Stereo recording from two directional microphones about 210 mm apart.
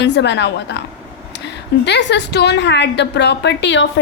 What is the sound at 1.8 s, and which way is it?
A woman's voice, 55° left (ahead or behind).